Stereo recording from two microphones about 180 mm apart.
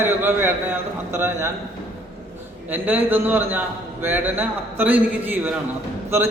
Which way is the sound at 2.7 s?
10° right (ahead or behind).